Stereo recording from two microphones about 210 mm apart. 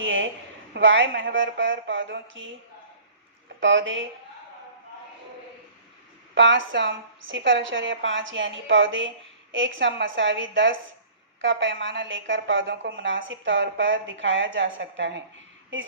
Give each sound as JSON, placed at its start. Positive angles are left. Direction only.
{"t": 0.0, "sound": "a sound", "side_deg": -65}
{"t": 0.7, "sound": "a woman's voice", "side_deg": -65}
{"t": 3.6, "sound": "a woman's voice", "side_deg": -60}
{"t": 6.3, "sound": "a woman's voice", "side_deg": -60}